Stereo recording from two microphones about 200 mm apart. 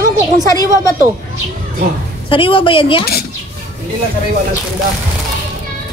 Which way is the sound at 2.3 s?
25° left (ahead or behind).